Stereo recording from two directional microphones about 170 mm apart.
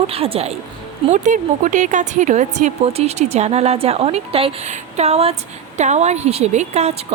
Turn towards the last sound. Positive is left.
turn(degrees=-40)  # may be behind; listen again after turning